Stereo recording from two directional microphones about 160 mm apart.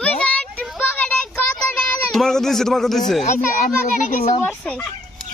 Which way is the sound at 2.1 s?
Centre (ahead or behind).